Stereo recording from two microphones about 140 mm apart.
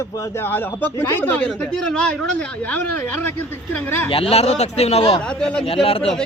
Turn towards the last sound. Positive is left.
turn(degrees=40)  # may be behind; listen again after turning